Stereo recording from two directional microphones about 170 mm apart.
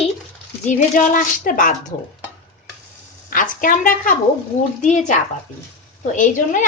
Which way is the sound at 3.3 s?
55° left (ahead or behind).